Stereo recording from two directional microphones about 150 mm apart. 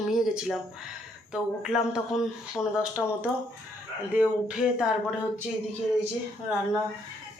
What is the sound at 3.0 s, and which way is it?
Speech, 5° left (ahead or behind).